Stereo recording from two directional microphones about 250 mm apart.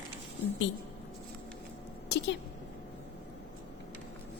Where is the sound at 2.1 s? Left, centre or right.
Left.